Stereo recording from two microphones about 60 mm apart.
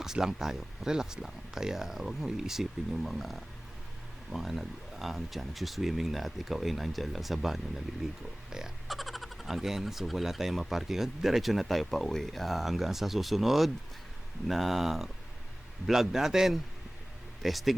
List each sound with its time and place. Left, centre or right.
0.0 s speech: centre